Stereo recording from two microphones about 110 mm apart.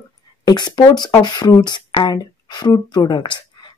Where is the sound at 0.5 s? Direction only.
40° left (ahead or behind).